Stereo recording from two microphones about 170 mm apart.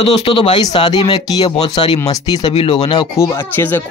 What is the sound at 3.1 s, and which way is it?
Speech, 15° left (ahead or behind).